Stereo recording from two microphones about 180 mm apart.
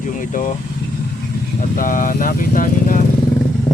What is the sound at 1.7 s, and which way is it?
Speech, 50° left (ahead or behind).